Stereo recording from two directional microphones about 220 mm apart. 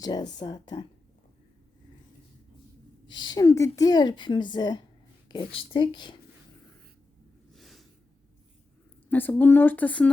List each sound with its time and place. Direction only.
0.0 s a woman's voice: 20° left (ahead or behind)
3.1 s a woman's voice: 20° left (ahead or behind)
7.5 s snort: centre (ahead or behind)
9.0 s speech: 10° left (ahead or behind)